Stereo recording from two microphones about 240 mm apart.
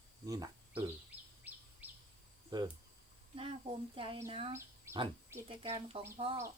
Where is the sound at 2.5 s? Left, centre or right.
Centre.